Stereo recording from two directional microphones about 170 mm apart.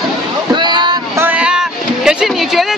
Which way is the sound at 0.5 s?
25° right (ahead or behind).